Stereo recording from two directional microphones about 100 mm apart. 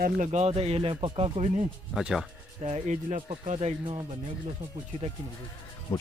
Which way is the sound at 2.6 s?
90° right.